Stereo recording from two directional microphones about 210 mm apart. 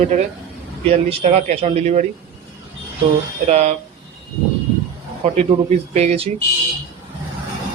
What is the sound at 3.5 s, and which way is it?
Speech, 30° right (ahead or behind).